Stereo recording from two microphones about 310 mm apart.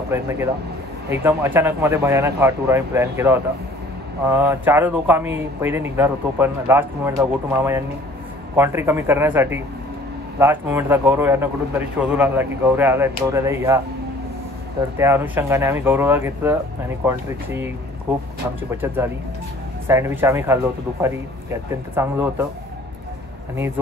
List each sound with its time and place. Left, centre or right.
0.1 s speech: centre
15.0 s speech: centre
19.9 s speech: centre